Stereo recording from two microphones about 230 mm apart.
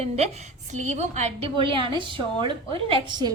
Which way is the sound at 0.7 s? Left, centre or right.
Right.